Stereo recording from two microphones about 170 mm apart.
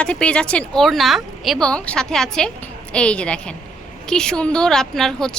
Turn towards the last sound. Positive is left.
turn(degrees=5)  # may be behind; listen again after turning